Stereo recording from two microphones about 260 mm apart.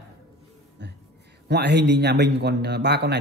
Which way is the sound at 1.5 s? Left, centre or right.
Right.